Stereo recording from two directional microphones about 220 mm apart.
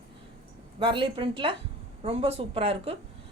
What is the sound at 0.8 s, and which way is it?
A woman's voice, 25° right (ahead or behind).